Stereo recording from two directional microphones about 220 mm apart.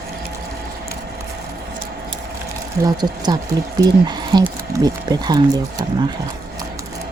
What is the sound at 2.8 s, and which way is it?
Speech, 20° right (ahead or behind).